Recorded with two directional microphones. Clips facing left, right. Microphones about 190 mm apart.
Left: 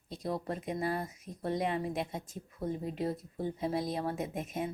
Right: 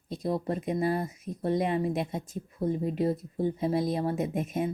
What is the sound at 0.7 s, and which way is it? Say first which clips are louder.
Speech: right 6 dB; 25° right (ahead or behind).